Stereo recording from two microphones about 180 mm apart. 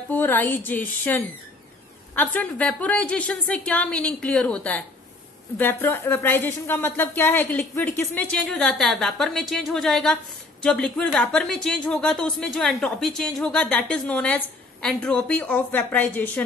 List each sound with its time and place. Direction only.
0.1 s speech: 10° left (ahead or behind)